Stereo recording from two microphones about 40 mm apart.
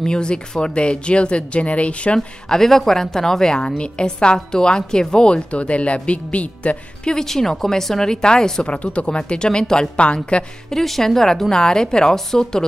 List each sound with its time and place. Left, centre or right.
0.0 s a woman's voice: left
2.1 s a woman's voice: centre; by 6.8 s left
7.1 s a woman's voice: centre
8.6 s a woman's voice: left
10.7 s a woman's voice: centre
11.5 s a woman's voice: centre